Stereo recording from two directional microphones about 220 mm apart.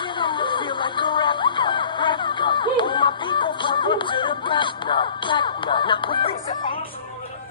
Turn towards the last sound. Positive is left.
turn(degrees=20)  # may be behind; listen again after turning